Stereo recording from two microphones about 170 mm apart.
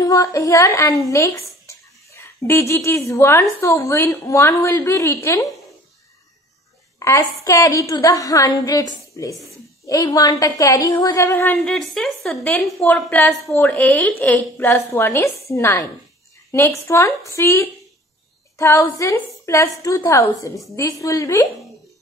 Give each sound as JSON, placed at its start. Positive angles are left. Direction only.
{"t": 0.0, "sound": "a woman's voice", "side_deg": 20}
{"t": 7.0, "sound": "a woman's voice", "side_deg": 15}